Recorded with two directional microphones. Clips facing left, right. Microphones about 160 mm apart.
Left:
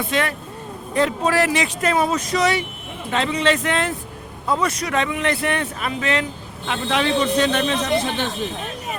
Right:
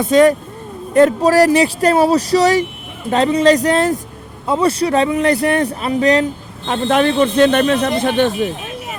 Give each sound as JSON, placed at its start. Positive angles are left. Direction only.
{"t": 0.0, "sound": "speech", "side_deg": -40}
{"t": 6.7, "sound": "speech", "side_deg": -45}